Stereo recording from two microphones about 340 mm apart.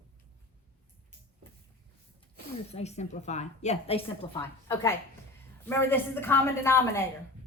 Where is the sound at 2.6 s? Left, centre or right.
Centre.